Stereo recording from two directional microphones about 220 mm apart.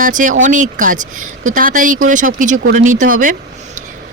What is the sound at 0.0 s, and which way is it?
Speech, 35° right (ahead or behind).